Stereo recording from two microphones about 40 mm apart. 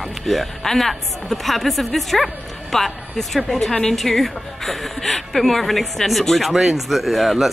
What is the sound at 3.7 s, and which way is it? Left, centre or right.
Speech, centre.